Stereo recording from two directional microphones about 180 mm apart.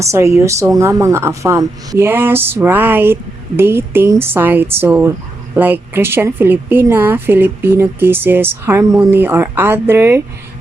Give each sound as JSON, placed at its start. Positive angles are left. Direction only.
{"t": 0.0, "sound": "a woman's voice", "side_deg": -15}